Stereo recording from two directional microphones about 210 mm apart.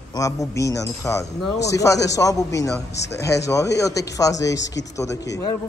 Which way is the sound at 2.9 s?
55° left (ahead or behind).